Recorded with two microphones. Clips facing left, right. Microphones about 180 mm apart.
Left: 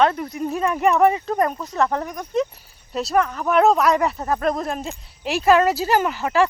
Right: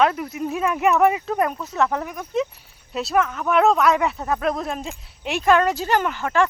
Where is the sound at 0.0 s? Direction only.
5° right (ahead or behind).